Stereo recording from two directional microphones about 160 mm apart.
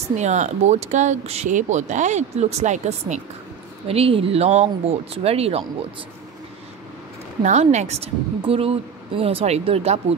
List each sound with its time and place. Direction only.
0.1 s speech: 45° right (ahead or behind)
3.8 s a woman's voice: 35° right (ahead or behind)
7.4 s a woman's voice: 45° right (ahead or behind)